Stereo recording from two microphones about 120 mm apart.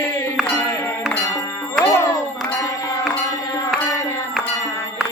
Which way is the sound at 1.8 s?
25° left (ahead or behind).